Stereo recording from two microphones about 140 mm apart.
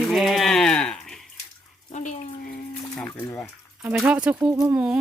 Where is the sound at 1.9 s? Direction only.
60° left (ahead or behind).